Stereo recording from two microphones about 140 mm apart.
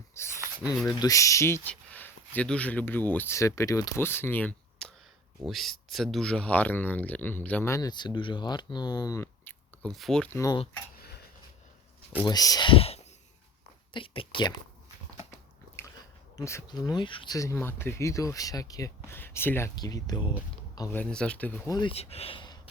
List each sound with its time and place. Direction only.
0.1 s a sound: 20° left (ahead or behind)
0.9 s speech: 25° left (ahead or behind)
5.5 s speech: centre (ahead or behind)
7.7 s speech: 30° left (ahead or behind)
9.9 s speech: 5° left (ahead or behind)
10.3 s speech: 20° left (ahead or behind)
12.2 s speech: 30° left (ahead or behind)
16.4 s speech: 20° left (ahead or behind)
16.6 s speech: 30° left (ahead or behind)
17.3 s speech: 20° left (ahead or behind)
19.7 s speech: 30° left (ahead or behind)
20.9 s speech: 5° left (ahead or behind)
21.7 s speech: 30° left (ahead or behind)
21.9 s speech: 45° left (ahead or behind)